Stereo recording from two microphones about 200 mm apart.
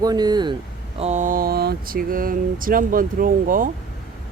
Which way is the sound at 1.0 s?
35° right (ahead or behind).